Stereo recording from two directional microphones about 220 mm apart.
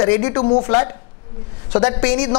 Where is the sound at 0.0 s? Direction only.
20° left (ahead or behind).